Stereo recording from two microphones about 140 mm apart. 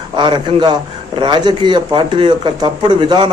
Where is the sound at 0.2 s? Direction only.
35° right (ahead or behind).